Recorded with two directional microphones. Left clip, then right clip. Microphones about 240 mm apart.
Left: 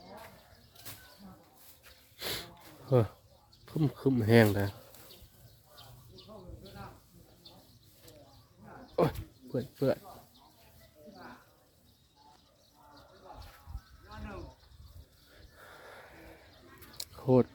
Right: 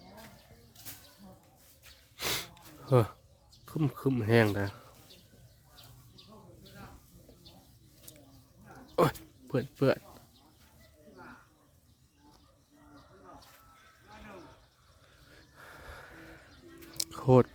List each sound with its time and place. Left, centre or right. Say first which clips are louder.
2.1 s sniff: right 4 dB; right
3.7 s speech: left 1 dB; centre
9.0 s a sound: right 2 dB; right
9.5 s speech: right 3 dB; right
15.5 s wheeze: right 1 dB; centre
17.0 s a sound: right 3 dB; right